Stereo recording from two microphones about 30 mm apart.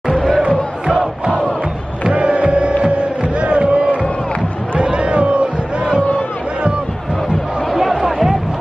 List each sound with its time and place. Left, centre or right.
0.1 s crowd: centre
2.0 s crowd: right
4.7 s a sound: right
7.7 s music: centre